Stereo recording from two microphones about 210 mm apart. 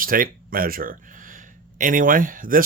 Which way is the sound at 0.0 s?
40° right (ahead or behind).